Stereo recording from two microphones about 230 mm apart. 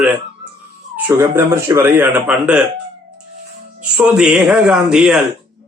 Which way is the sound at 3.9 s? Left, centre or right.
Centre.